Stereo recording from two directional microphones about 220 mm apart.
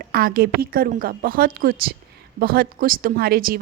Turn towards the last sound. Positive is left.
turn(degrees=-45)  # may be behind; listen again after turning